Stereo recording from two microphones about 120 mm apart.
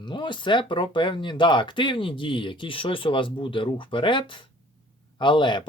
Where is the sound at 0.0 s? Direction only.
40° left (ahead or behind).